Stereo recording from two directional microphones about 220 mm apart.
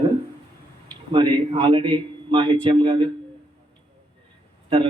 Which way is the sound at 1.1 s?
20° right (ahead or behind).